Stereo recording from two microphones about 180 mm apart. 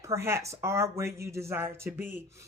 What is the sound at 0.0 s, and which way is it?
Speech, 15° right (ahead or behind).